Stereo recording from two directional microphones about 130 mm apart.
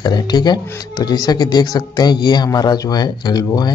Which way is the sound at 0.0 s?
35° left (ahead or behind).